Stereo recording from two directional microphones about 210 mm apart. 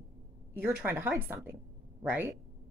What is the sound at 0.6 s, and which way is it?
A woman's voice, 10° right (ahead or behind).